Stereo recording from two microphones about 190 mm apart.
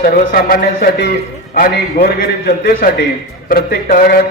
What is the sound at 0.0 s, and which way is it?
A man's voice, 50° left (ahead or behind).